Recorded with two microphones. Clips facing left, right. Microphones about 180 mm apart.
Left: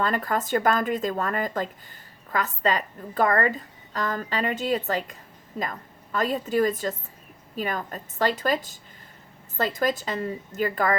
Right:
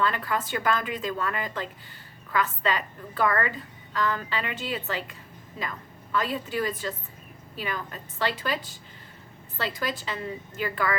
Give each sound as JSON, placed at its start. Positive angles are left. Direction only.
{"t": 0.0, "sound": "a woman's voice", "side_deg": 45}